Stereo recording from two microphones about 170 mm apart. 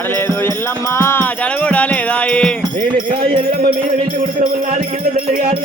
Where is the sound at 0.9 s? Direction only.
15° left (ahead or behind).